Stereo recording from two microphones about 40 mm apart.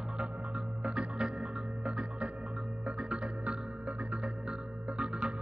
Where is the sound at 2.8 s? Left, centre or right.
Right.